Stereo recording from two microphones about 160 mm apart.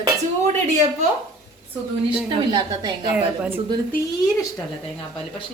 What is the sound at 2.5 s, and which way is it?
Speech, 30° right (ahead or behind).